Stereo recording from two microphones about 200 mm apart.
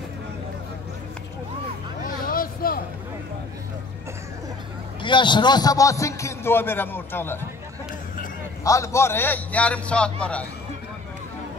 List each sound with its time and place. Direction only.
2.0 s vehicle: 45° left (ahead or behind)
5.0 s a man's voice: 25° left (ahead or behind)
8.6 s a man's voice: 15° left (ahead or behind)